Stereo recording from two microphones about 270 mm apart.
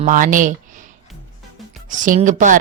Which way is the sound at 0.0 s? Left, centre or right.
Right.